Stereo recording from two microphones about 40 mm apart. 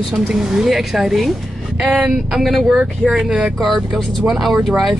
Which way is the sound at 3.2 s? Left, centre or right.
Right.